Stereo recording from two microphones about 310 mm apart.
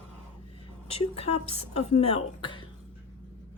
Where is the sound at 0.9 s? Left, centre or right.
Centre.